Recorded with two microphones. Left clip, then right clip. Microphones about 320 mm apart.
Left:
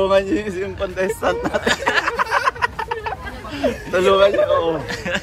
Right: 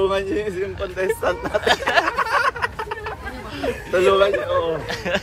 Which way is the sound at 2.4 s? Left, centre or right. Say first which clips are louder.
Left 2 dB; left.